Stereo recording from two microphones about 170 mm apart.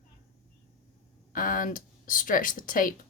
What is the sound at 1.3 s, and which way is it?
Speech, 55° left (ahead or behind).